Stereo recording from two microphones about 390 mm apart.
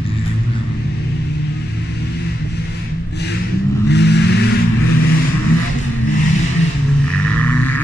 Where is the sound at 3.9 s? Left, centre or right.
Left.